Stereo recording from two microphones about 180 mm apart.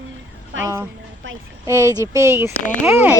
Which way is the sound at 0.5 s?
90° right.